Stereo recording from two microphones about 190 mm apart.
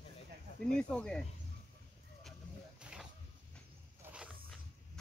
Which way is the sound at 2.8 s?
5° right (ahead or behind).